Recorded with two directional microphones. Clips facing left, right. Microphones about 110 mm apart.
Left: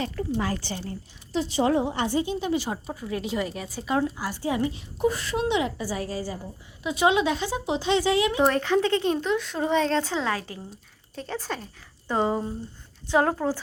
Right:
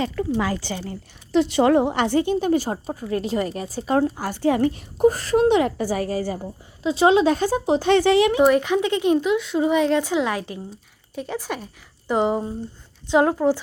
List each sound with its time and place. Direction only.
0.2 s a woman's voice: 90° right
1.3 s a woman's voice: 65° right (ahead or behind)
6.8 s speech: 35° right (ahead or behind)
7.3 s speech: 45° right (ahead or behind); by 8.4 s 65° right (ahead or behind)
8.4 s a woman's voice: 10° right (ahead or behind)
9.3 s a woman's voice: 5° right (ahead or behind)